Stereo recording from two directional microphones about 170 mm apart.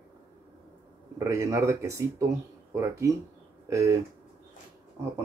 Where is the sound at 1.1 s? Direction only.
20° right (ahead or behind).